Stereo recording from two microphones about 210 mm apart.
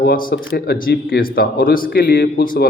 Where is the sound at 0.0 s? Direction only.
45° left (ahead or behind).